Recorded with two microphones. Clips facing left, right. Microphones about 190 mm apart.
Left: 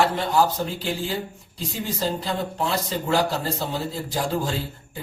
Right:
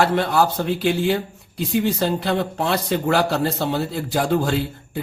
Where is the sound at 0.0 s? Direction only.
70° right (ahead or behind).